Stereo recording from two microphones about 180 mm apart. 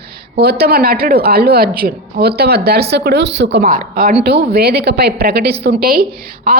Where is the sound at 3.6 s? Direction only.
50° right (ahead or behind).